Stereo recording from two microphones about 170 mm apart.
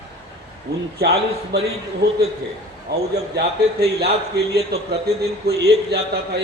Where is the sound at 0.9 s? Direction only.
70° right (ahead or behind).